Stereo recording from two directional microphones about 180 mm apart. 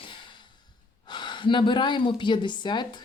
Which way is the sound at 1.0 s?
25° left (ahead or behind).